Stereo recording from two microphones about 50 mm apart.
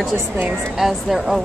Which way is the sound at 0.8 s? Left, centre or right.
Centre.